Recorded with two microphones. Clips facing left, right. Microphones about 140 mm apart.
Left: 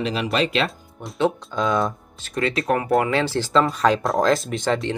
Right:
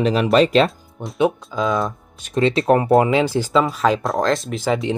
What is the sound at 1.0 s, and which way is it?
Speech, 25° right (ahead or behind).